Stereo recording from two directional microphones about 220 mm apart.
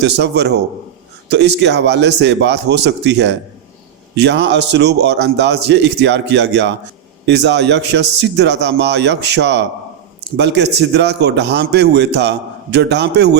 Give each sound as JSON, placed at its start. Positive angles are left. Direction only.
{"t": 0.0, "sound": "a man's voice", "side_deg": -50}